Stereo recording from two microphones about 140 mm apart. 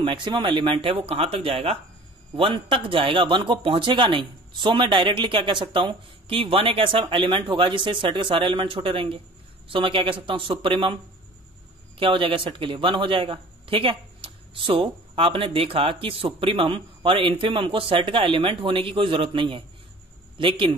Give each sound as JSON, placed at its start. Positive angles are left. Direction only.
{"t": 0.0, "sound": "speech", "side_deg": -35}
{"t": 12.0, "sound": "speech", "side_deg": -40}